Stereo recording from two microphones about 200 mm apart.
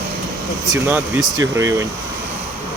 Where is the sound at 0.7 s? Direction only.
10° right (ahead or behind).